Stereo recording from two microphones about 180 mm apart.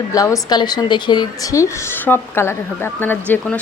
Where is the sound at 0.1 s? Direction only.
20° left (ahead or behind).